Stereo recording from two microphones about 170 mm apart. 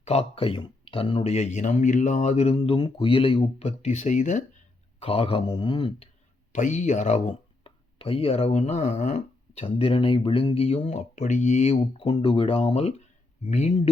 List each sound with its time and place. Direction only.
0.0 s speech: 35° left (ahead or behind)
4.9 s speech: 35° left (ahead or behind)
6.5 s speech: 45° left (ahead or behind)
7.3 s speech: 30° left (ahead or behind)